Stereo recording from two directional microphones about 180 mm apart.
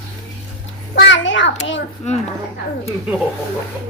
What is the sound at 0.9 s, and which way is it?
Speech, 90° left.